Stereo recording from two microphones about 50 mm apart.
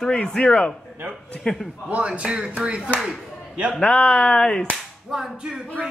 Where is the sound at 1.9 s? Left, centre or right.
Right.